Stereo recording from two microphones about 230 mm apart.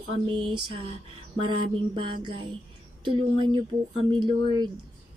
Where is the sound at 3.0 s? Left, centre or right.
Right.